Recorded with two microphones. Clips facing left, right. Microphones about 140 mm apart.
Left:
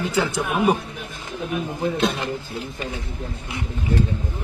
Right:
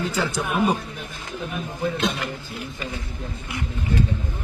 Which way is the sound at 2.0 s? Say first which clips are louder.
Left 3 dB; 30° left (ahead or behind).